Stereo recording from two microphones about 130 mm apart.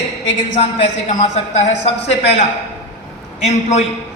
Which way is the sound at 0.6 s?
55° left (ahead or behind).